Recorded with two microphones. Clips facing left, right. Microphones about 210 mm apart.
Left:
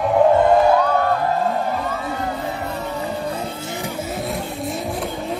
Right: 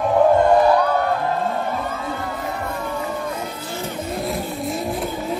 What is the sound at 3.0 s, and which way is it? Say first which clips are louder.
Vehicle: left 1 dB; 30° left (ahead or behind).